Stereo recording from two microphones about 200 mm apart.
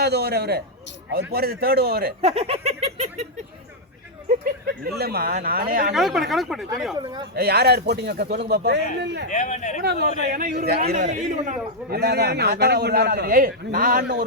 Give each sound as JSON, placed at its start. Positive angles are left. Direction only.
{"t": 0.0, "sound": "a man's voice", "side_deg": -55}
{"t": 2.2, "sound": "a sound", "side_deg": -30}
{"t": 4.6, "sound": "a man's voice", "side_deg": -55}
{"t": 5.9, "sound": "speech", "side_deg": 0}
{"t": 6.9, "sound": "speech", "side_deg": -20}
{"t": 7.3, "sound": "a man's voice", "side_deg": -55}
{"t": 9.3, "sound": "speech", "side_deg": 35}
{"t": 9.8, "sound": "a man's voice", "side_deg": -50}